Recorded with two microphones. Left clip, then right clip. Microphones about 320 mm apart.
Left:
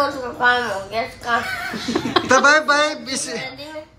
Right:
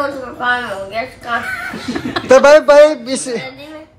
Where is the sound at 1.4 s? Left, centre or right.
Left.